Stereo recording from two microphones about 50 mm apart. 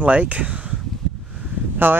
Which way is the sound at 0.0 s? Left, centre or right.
Right.